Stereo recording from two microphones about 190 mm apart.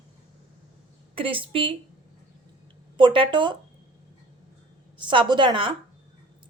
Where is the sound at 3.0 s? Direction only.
25° right (ahead or behind).